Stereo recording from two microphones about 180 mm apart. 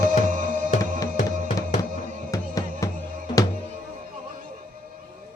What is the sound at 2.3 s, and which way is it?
Music, 20° left (ahead or behind).